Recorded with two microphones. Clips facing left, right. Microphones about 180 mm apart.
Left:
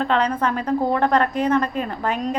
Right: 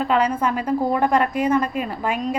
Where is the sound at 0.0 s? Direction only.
10° right (ahead or behind).